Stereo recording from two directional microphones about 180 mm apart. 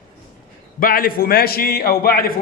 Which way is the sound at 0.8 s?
50° left (ahead or behind).